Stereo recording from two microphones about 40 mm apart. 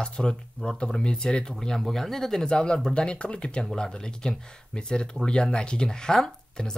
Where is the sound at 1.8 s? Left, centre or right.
Centre.